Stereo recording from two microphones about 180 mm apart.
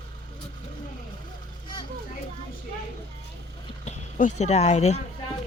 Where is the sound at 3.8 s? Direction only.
40° left (ahead or behind).